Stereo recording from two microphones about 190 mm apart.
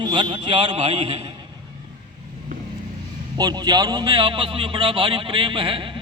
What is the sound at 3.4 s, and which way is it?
A man's voice, 20° right (ahead or behind).